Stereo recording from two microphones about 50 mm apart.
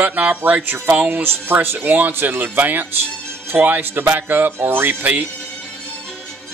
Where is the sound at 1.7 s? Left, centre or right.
Right.